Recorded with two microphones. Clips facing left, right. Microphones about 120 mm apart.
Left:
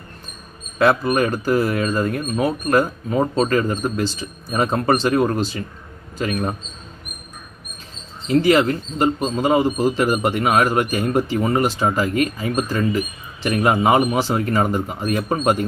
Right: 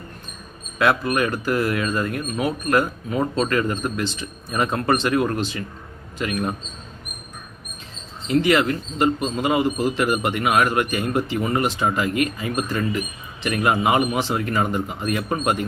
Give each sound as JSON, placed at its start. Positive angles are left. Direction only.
{"t": 0.8, "sound": "speech", "side_deg": 30}
{"t": 8.3, "sound": "speech", "side_deg": 35}